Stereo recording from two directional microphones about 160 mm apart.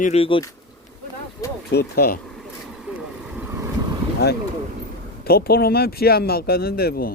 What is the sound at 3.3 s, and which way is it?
Vehicle, 10° right (ahead or behind).